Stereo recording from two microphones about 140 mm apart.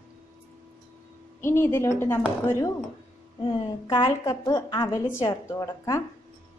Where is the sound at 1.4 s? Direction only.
20° left (ahead or behind).